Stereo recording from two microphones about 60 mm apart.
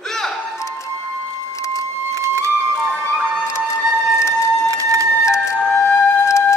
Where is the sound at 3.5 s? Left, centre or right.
Left.